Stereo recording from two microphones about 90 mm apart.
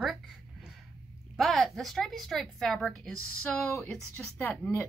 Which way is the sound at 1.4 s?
Centre (ahead or behind).